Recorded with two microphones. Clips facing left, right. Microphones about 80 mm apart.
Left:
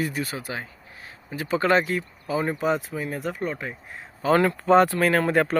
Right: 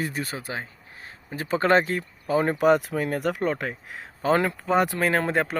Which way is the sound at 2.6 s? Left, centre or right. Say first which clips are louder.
Right 5 dB; right.